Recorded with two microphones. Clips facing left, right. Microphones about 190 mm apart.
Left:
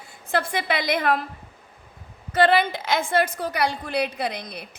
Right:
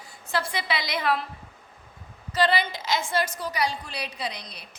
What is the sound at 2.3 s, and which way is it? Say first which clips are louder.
A woman's voice: left 5 dB; 55° left (ahead or behind).